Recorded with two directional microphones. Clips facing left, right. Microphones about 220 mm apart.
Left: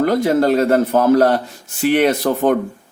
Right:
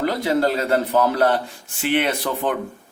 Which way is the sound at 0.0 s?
45° left (ahead or behind).